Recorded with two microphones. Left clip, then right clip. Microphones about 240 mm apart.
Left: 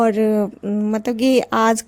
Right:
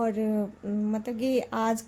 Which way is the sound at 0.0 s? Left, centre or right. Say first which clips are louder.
Left 12 dB; left.